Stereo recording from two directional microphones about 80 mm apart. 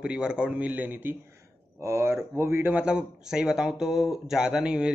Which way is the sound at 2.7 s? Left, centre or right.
Centre.